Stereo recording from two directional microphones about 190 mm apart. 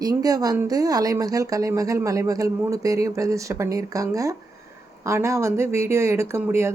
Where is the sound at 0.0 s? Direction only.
20° right (ahead or behind).